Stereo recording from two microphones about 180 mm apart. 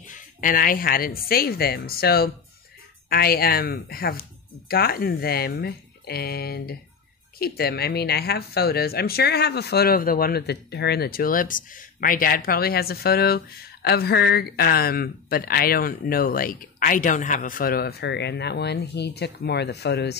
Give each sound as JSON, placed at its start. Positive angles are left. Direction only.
{"t": 0.0, "sound": "speech", "side_deg": 50}